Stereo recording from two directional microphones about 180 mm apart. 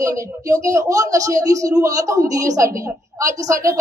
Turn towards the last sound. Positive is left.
turn(degrees=-20)  # may be behind; listen again after turning